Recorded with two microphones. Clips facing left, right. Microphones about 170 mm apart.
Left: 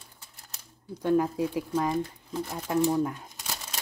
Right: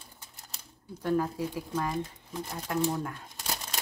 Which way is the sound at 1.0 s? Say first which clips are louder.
Left 4 dB; 15° left (ahead or behind).